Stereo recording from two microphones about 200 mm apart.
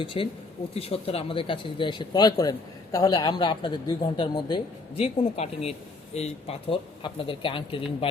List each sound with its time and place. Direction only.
0.0 s speech: 25° left (ahead or behind)